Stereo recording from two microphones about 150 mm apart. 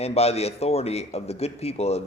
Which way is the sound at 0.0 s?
45° left (ahead or behind).